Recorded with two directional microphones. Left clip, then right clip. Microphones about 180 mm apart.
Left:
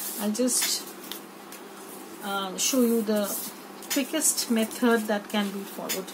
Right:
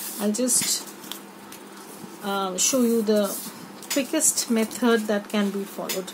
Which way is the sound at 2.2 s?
60° right (ahead or behind).